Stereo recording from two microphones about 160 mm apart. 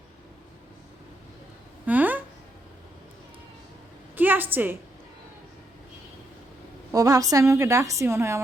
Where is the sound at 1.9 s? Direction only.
10° right (ahead or behind).